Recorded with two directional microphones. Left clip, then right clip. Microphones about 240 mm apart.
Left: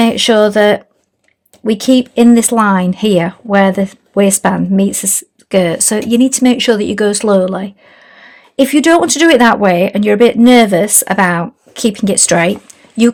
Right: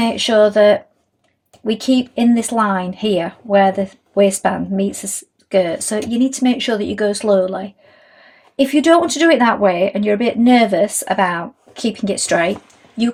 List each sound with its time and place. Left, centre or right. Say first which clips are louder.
0.0 s a woman's voice: left 4 dB; left
2.3 s a woman's voice: left 6 dB; left